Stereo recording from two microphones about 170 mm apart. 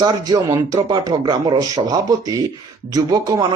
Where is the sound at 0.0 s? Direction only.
25° right (ahead or behind).